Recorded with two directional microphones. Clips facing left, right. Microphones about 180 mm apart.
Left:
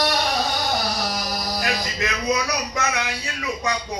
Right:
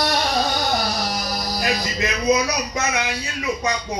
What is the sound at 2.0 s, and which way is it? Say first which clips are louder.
A man's voice: right 5 dB; 20° right (ahead or behind).